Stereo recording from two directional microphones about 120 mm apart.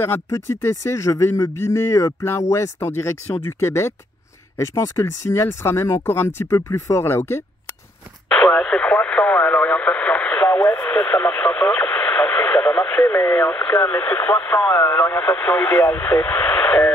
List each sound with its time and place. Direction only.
0.0 s speech: 20° left (ahead or behind)
8.3 s speech: 5° left (ahead or behind)